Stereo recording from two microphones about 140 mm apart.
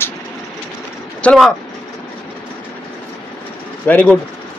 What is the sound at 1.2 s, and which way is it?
Speech, 5° left (ahead or behind).